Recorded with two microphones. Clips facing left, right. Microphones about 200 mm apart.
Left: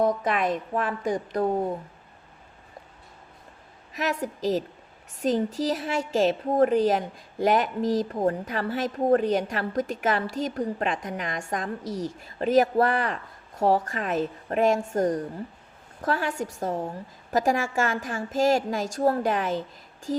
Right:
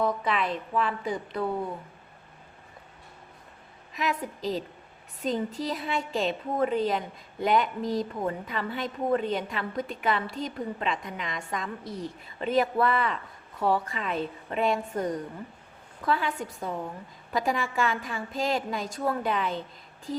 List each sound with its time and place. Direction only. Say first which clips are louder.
0.0 s a woman's voice: left 4 dB; 45° left (ahead or behind)
3.9 s a woman's voice: left 2 dB; 45° left (ahead or behind)
5.7 s a woman's voice: left 4 dB; 45° left (ahead or behind)